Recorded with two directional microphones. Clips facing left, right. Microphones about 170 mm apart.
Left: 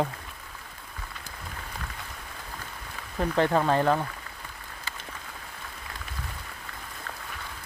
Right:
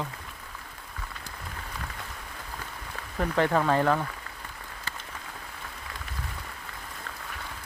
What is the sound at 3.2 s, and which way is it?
Speech, 25° left (ahead or behind).